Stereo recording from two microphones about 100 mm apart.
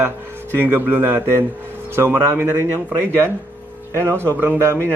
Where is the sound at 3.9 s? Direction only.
25° right (ahead or behind).